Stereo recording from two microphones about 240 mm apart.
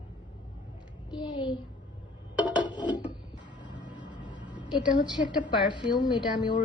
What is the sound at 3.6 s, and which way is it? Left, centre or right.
Music, centre.